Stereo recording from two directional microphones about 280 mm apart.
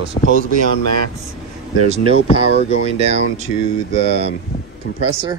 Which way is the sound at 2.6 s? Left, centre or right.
Right.